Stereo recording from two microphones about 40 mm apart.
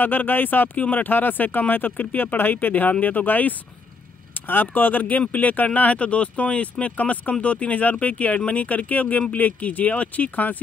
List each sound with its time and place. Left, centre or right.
0.0 s speech: left
1.0 s speech: left